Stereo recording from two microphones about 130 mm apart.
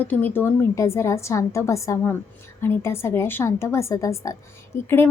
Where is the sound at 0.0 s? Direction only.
15° left (ahead or behind).